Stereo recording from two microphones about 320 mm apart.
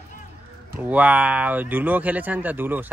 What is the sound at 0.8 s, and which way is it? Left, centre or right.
Speech, centre.